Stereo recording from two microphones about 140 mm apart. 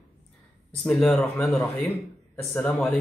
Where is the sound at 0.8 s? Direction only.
10° left (ahead or behind).